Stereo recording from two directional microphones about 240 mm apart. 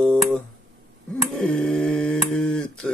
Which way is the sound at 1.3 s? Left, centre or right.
Centre.